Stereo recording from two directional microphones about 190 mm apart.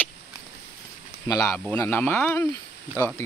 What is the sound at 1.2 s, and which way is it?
Speech, 15° left (ahead or behind).